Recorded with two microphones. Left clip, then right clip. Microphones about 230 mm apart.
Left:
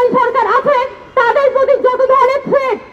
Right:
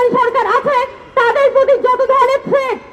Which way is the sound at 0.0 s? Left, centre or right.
Right.